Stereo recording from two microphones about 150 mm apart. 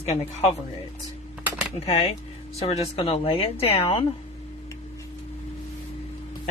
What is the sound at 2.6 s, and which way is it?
Speech, 40° left (ahead or behind).